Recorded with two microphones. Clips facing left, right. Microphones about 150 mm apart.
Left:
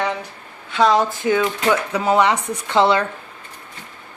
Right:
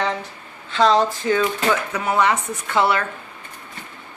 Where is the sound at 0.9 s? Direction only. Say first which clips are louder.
Left 1 dB; 15° left (ahead or behind).